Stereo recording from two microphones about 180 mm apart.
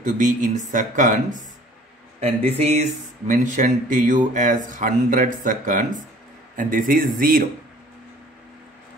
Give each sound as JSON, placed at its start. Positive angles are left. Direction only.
{"t": 0.0, "sound": "speech", "side_deg": -45}